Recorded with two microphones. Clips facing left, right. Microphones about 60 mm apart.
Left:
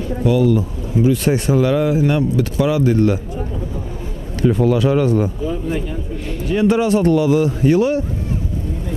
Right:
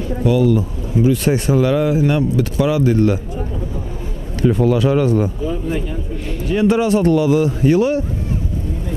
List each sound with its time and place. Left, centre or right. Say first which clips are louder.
0.2 s speech: even; centre
4.4 s speech: even; centre